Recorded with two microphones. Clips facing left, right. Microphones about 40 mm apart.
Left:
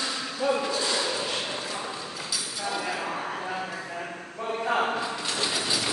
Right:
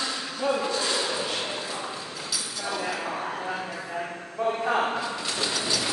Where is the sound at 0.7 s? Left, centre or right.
Right.